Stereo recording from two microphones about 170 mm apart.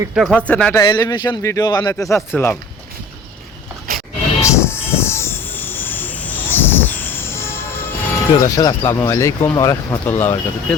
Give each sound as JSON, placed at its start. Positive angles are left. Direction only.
{"t": 0.1, "sound": "speech", "side_deg": 0}
{"t": 0.7, "sound": "speech", "side_deg": 20}
{"t": 4.4, "sound": "train", "side_deg": 15}
{"t": 8.4, "sound": "speech", "side_deg": 20}